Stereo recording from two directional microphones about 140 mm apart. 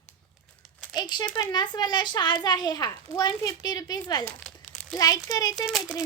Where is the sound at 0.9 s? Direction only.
30° left (ahead or behind).